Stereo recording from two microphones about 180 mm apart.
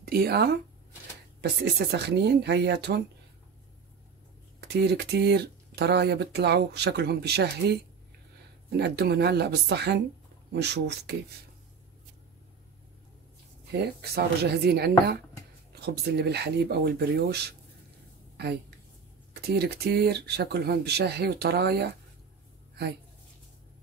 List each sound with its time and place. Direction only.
0.0 s speech: 60° right (ahead or behind)
4.6 s speech: 70° right (ahead or behind)
13.7 s speech: 65° right (ahead or behind)
19.3 s speech: 60° right (ahead or behind)